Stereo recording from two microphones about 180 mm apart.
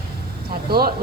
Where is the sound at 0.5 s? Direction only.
55° right (ahead or behind).